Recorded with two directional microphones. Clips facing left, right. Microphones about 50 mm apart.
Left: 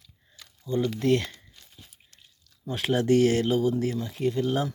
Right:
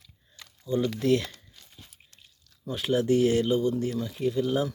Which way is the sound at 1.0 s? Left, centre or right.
Left.